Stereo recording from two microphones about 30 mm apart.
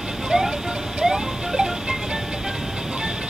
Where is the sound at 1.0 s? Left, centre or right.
Right.